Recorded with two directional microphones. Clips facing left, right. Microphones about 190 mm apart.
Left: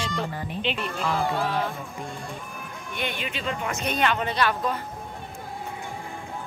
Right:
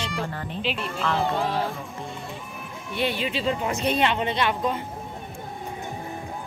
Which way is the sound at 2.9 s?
30° right (ahead or behind).